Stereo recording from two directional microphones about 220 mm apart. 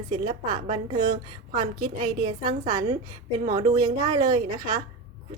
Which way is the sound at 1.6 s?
40° right (ahead or behind).